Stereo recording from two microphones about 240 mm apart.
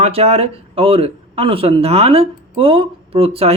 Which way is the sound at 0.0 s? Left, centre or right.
Right.